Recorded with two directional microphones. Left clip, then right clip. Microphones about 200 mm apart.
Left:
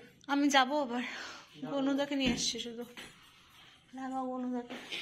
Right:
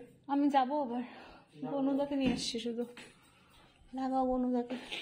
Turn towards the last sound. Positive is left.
turn(degrees=-35)  # may be behind; listen again after turning